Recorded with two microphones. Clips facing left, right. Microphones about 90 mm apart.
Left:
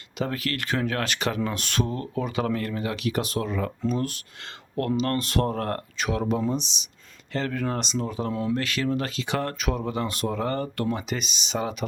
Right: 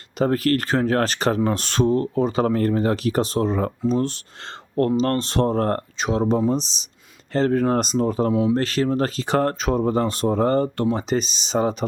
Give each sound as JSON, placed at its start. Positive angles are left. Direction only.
{"t": 0.2, "sound": "speech", "side_deg": -40}
{"t": 8.3, "sound": "speech", "side_deg": -15}
{"t": 8.5, "sound": "speech", "side_deg": -35}